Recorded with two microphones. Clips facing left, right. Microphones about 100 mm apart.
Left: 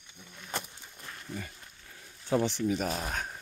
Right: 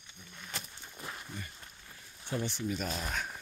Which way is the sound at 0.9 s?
15° right (ahead or behind).